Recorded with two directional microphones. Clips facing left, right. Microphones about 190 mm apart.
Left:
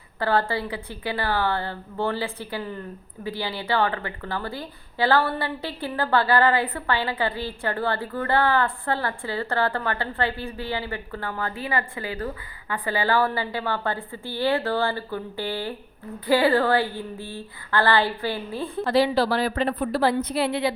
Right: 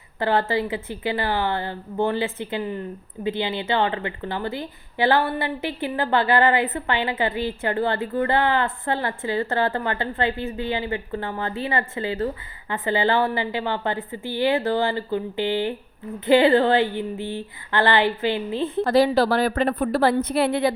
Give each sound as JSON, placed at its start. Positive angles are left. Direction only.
{"t": 0.2, "sound": "a woman's voice", "side_deg": -20}
{"t": 18.9, "sound": "a woman's voice", "side_deg": -45}